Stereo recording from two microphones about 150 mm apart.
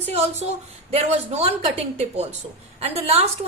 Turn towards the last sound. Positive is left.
turn(degrees=-45)  # may be behind; listen again after turning